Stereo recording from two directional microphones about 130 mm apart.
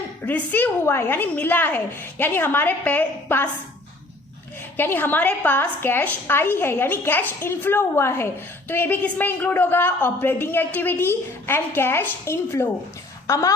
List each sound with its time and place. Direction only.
0.3 s a woman's voice: 15° left (ahead or behind)
4.8 s a woman's voice: 15° left (ahead or behind)